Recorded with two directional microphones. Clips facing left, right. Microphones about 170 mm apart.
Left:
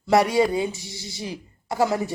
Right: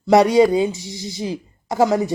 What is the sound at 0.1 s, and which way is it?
Speech, 20° right (ahead or behind).